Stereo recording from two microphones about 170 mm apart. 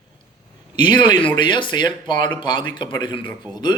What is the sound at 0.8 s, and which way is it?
A man's voice, 25° left (ahead or behind).